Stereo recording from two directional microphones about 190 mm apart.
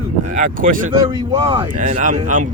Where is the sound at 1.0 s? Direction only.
30° right (ahead or behind).